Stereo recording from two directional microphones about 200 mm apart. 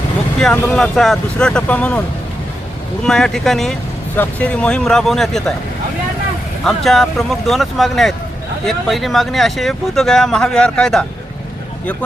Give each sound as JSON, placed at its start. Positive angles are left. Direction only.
{"t": 0.3, "sound": "speech", "side_deg": 5}
{"t": 3.0, "sound": "speech", "side_deg": 5}
{"t": 6.7, "sound": "speech", "side_deg": 0}